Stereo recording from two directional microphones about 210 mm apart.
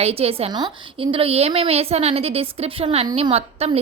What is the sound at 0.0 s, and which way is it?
A woman's voice, 30° right (ahead or behind).